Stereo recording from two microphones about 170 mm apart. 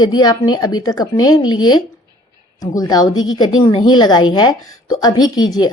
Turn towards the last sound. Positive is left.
turn(degrees=25)  # may be behind; listen again after turning